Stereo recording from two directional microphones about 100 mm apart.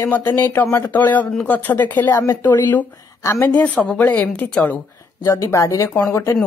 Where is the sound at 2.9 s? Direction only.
30° left (ahead or behind).